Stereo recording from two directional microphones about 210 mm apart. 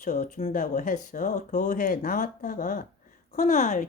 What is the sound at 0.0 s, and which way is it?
Speech, 35° left (ahead or behind).